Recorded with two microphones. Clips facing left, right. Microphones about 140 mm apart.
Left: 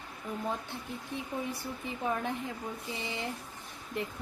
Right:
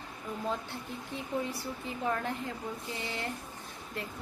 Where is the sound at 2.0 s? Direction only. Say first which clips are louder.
Even; 15° left (ahead or behind).